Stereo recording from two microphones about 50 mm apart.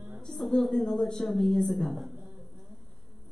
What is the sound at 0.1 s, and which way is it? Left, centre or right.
A woman's voice, centre.